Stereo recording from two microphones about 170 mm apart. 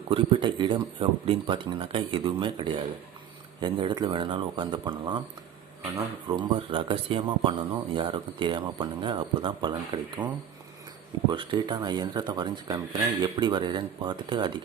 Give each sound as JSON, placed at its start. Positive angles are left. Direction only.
{"t": 0.1, "sound": "speech", "side_deg": -30}
{"t": 6.3, "sound": "speech", "side_deg": -30}